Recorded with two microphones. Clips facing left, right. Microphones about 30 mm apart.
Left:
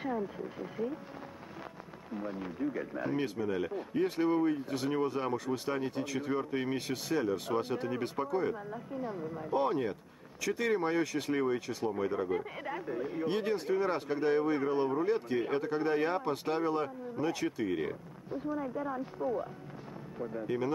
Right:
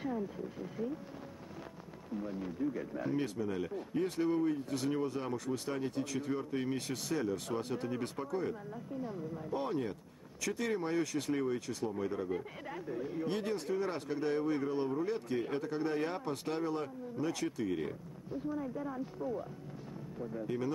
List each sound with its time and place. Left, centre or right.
0.0 s speech: centre
2.1 s speech: centre